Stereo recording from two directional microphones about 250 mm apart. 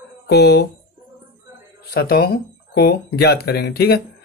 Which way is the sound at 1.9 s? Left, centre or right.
Left.